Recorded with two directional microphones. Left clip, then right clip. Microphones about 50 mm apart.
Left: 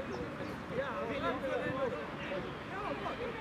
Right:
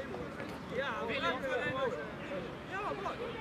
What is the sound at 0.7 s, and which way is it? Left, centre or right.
Speech, right.